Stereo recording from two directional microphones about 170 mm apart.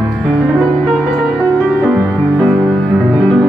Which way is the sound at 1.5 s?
10° right (ahead or behind).